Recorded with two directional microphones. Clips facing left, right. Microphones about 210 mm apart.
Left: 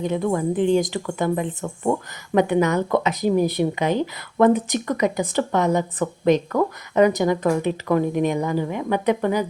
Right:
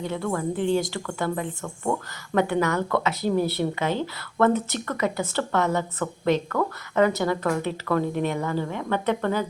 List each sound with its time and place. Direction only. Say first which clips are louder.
0.0 s speech: left 5 dB; 20° left (ahead or behind)